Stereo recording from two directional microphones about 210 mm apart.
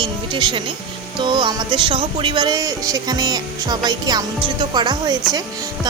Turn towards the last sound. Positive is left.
turn(degrees=-20)  # may be behind; listen again after turning